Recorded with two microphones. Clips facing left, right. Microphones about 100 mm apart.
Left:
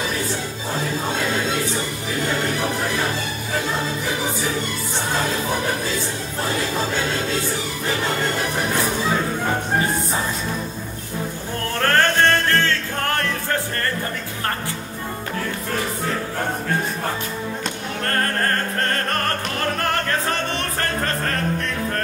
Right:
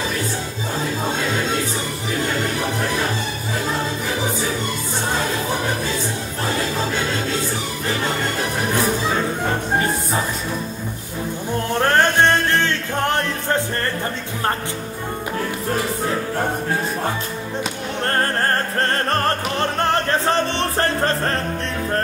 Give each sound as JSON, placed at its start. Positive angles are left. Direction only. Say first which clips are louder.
{"t": 11.8, "sound": "music", "louder": "right 1 dB", "side_deg": -20}
{"t": 18.0, "sound": "music", "louder": "right 2 dB", "side_deg": -30}